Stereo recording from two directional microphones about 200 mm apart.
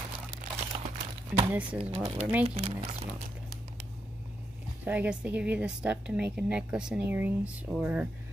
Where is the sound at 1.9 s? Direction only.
20° right (ahead or behind).